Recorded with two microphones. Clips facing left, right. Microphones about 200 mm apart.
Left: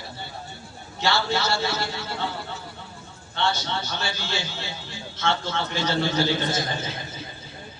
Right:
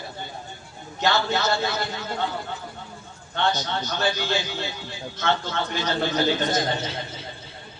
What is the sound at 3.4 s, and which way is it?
A man's voice, 15° right (ahead or behind).